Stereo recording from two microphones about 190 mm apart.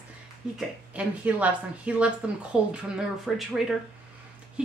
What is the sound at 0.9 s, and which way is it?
A woman's voice, 5° right (ahead or behind).